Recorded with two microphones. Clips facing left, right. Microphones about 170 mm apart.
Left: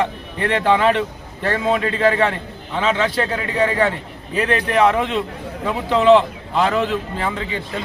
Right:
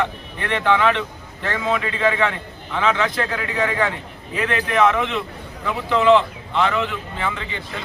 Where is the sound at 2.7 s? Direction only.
25° left (ahead or behind); by 7.4 s 40° left (ahead or behind).